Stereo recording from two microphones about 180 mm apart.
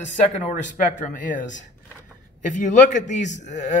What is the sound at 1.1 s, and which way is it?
A man's voice, 45° left (ahead or behind).